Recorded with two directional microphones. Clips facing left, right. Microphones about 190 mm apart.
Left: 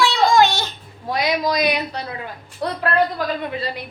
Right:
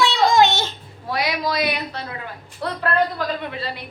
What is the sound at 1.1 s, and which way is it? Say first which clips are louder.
A woman's voice: left 3 dB; 20° left (ahead or behind).